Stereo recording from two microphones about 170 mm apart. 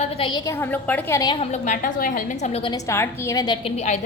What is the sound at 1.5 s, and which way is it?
A woman's voice, 50° left (ahead or behind).